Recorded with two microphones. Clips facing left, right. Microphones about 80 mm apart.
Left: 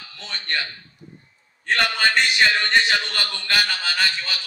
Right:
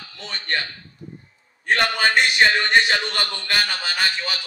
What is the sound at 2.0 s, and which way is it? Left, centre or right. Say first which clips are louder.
A man's voice: right 2 dB; right.